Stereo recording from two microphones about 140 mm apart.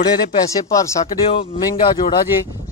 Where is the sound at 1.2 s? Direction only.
40° left (ahead or behind).